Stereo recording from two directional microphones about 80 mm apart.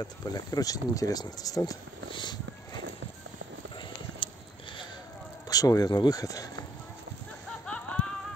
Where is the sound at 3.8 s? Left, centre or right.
Left.